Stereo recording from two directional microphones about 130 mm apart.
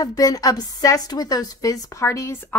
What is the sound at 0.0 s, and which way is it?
A woman's voice, 30° left (ahead or behind).